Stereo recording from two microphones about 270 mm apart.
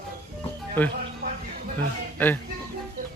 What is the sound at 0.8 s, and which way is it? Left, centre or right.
Speech, centre.